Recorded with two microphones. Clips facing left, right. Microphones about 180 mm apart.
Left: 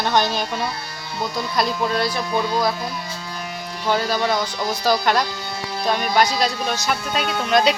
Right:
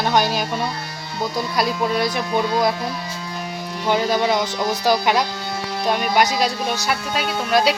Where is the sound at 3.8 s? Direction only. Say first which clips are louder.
Right 2 dB; 15° right (ahead or behind).